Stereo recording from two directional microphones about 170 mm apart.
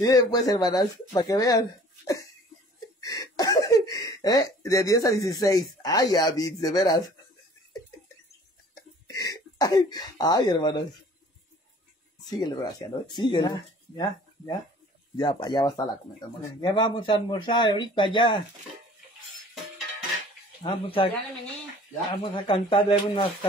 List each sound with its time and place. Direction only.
0.0 s speech: 20° left (ahead or behind)
9.0 s speech: 20° left (ahead or behind)
12.3 s speech: 25° left (ahead or behind)
20.6 s speech: 30° left (ahead or behind)
22.1 s speech: 30° left (ahead or behind)